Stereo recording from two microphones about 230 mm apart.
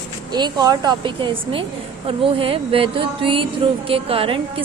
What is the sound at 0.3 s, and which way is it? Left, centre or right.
Speech, centre.